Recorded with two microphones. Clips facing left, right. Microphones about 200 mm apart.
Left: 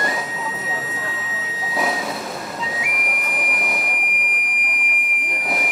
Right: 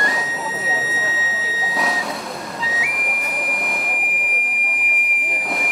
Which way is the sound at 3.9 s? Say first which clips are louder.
Right 2 dB; 30° right (ahead or behind).